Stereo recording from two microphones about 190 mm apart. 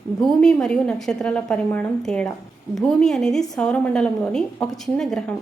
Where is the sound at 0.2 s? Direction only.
Centre (ahead or behind).